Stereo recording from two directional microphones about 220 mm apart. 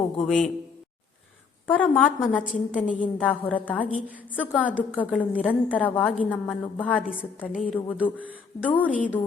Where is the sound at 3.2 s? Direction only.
5° left (ahead or behind).